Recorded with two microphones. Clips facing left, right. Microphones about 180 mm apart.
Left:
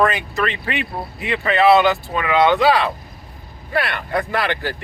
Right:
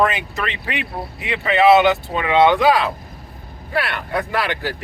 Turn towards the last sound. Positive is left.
turn(degrees=-5)  # may be behind; listen again after turning